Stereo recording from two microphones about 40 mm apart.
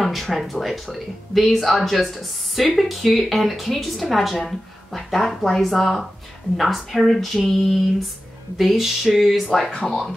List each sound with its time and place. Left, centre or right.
0.0 s a woman's voice: centre
9.7 s speech: left